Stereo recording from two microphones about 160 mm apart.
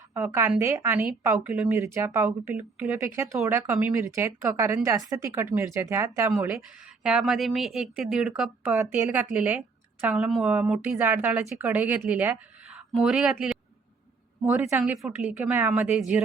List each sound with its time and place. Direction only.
0.1 s speech: 15° right (ahead or behind)